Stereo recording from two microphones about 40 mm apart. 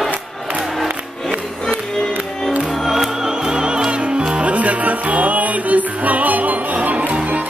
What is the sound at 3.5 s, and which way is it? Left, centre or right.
Music, right.